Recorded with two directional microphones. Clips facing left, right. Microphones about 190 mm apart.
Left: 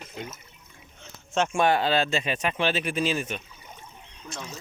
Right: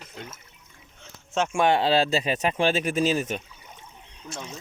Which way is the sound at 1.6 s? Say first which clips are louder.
Right 3 dB; 25° right (ahead or behind).